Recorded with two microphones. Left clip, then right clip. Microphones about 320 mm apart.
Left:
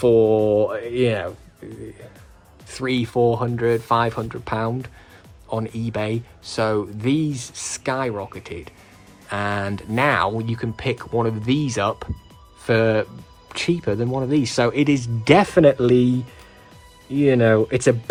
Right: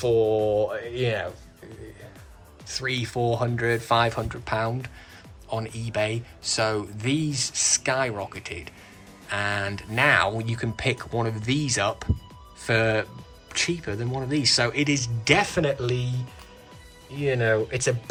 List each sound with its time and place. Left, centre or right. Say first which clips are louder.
0.0 s mantra: left 6 dB; centre
2.6 s speech: left 4 dB; centre
17.2 s mantra: left 7 dB; centre